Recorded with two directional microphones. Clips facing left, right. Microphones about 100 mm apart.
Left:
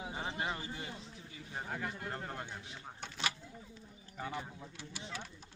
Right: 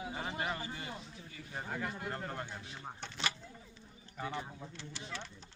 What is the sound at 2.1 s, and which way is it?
Speech, 10° left (ahead or behind).